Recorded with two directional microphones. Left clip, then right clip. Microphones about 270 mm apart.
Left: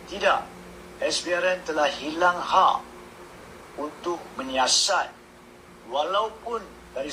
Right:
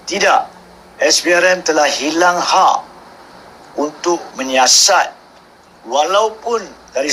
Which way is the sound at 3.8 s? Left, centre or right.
Right.